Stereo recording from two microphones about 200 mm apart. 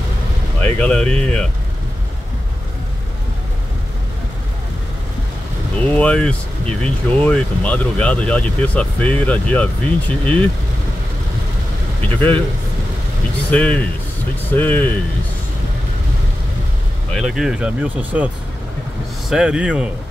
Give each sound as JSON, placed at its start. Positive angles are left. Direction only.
{"t": 0.6, "sound": "speech", "side_deg": 5}
{"t": 5.9, "sound": "speech", "side_deg": 5}
{"t": 12.1, "sound": "speech", "side_deg": 10}
{"t": 13.5, "sound": "speech", "side_deg": 5}
{"t": 17.1, "sound": "speech", "side_deg": 0}